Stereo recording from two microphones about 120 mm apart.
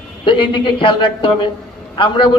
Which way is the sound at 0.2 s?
45° left (ahead or behind).